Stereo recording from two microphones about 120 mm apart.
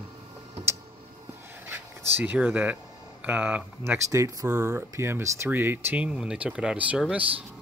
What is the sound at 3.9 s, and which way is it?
Speech, 25° right (ahead or behind).